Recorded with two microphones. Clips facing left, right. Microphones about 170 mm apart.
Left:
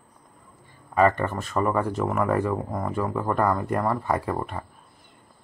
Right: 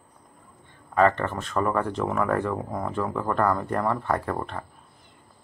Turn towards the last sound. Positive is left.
turn(degrees=5)  # may be behind; listen again after turning